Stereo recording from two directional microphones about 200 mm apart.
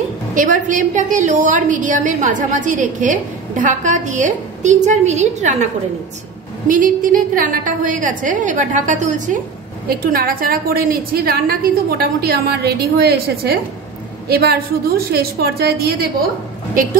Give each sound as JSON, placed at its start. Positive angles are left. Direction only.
{"t": 0.3, "sound": "a woman's voice", "side_deg": -40}
{"t": 6.7, "sound": "a woman's voice", "side_deg": -40}